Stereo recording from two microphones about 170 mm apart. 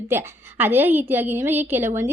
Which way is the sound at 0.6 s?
10° right (ahead or behind).